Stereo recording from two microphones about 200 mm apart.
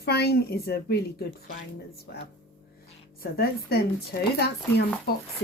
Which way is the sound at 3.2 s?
50° left (ahead or behind).